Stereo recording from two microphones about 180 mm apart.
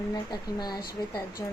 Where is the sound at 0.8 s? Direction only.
60° left (ahead or behind).